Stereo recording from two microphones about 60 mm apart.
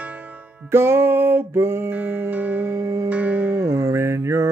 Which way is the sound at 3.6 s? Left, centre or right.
Right.